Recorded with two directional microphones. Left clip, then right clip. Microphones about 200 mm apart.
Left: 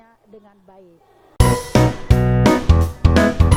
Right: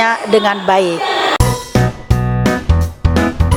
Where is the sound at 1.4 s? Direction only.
Centre (ahead or behind).